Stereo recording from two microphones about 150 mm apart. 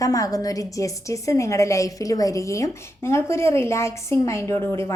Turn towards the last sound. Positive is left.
turn(degrees=20)  # may be behind; listen again after turning